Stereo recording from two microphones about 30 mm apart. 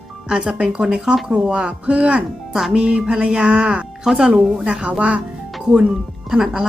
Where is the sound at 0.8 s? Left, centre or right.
Right.